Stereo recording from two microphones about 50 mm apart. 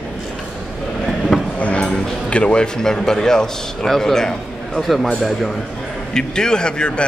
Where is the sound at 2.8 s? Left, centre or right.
Centre.